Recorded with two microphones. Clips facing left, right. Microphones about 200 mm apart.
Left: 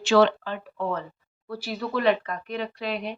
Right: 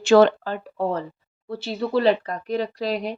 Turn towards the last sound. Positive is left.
turn(degrees=-35)  # may be behind; listen again after turning